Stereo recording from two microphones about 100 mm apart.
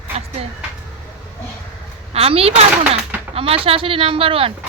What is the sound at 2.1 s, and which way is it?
A woman's voice, 75° right (ahead or behind).